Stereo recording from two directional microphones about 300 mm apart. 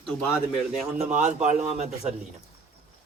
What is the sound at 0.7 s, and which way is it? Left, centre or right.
Speech, right.